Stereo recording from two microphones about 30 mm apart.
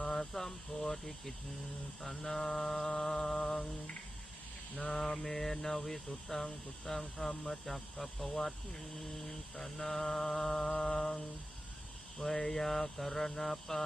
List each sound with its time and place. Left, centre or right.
0.1 s a sound: centre
0.7 s speech: centre
5.2 s speech: centre
12.2 s speech: centre